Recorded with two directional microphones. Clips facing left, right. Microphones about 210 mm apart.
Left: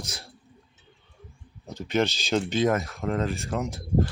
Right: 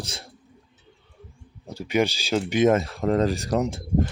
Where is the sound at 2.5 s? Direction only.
20° right (ahead or behind); by 3.8 s 35° right (ahead or behind).